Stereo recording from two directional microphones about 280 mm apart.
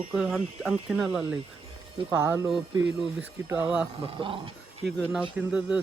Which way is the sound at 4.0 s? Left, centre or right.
Centre.